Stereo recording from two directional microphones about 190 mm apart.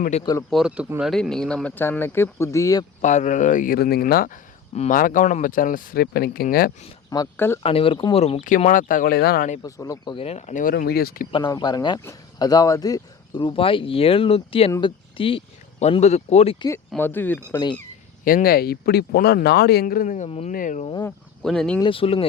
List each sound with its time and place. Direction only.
0.0 s speech: 35° left (ahead or behind)
0.5 s speech: 5° right (ahead or behind); by 2.8 s 15° left (ahead or behind)
3.0 s speech: 40° left (ahead or behind)
7.1 s speech: 15° left (ahead or behind)
7.6 s speech: 30° left (ahead or behind)
8.4 s speech: 45° left (ahead or behind)
9.6 s speech: 20° left (ahead or behind); by 11.3 s 55° left (ahead or behind)
11.3 s speech: 20° left (ahead or behind)
16.9 s speech: 10° left (ahead or behind)
18.3 s speech: 50° left (ahead or behind)
21.4 s speech: centre (ahead or behind)
21.8 s speech: 30° left (ahead or behind)